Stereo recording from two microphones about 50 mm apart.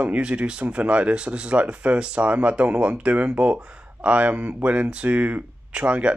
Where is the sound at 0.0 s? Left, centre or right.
Right.